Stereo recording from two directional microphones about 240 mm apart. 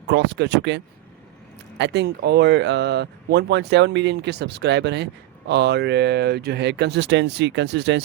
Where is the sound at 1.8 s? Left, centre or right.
Right.